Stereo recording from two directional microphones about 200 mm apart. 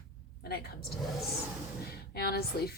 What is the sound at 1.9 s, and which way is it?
Speech, 50° left (ahead or behind).